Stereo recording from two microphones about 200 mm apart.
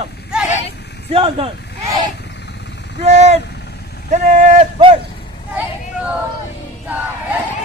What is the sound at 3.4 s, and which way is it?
Vehicle, 55° left (ahead or behind).